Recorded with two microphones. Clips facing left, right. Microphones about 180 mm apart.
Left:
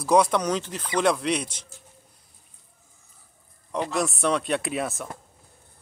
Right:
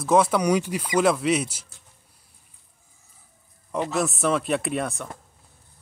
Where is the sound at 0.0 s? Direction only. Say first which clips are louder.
Right 1 dB; centre (ahead or behind).